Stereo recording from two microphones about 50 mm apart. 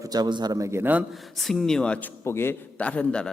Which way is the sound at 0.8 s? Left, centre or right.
Right.